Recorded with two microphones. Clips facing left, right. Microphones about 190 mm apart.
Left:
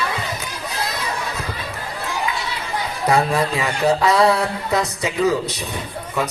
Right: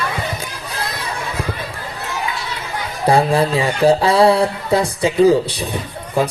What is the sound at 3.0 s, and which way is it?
Speech, 30° right (ahead or behind).